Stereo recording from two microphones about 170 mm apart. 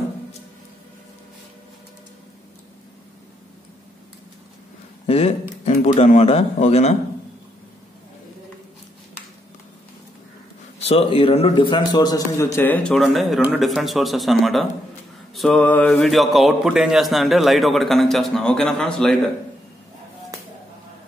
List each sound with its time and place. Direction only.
5.0 s speech: 35° left (ahead or behind)
10.9 s a man's voice: 35° left (ahead or behind)
12.5 s speech: 10° left (ahead or behind)